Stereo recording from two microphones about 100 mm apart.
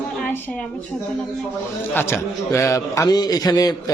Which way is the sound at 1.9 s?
25° left (ahead or behind).